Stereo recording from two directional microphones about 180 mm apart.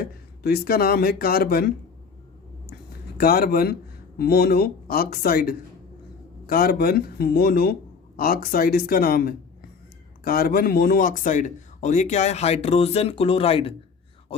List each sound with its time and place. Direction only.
0.4 s speech: 60° left (ahead or behind)
3.2 s speech: 55° left (ahead or behind); by 13.7 s 30° left (ahead or behind)